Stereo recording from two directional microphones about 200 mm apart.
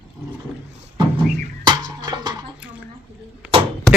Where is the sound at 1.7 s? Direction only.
20° right (ahead or behind).